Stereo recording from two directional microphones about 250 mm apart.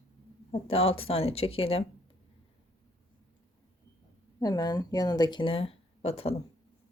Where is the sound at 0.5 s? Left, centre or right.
Left.